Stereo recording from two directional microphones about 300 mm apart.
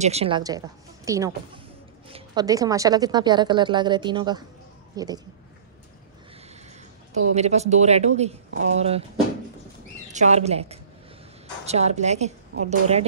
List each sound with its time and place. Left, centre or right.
0.0 s a woman's voice: right
7.3 s a woman's voice: right
10.1 s a woman's voice: right